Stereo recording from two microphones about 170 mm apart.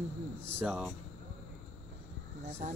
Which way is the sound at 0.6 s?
5° right (ahead or behind).